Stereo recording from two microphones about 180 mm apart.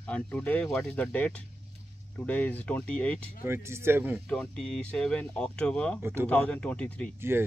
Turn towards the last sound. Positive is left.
turn(degrees=-15)  # may be behind; listen again after turning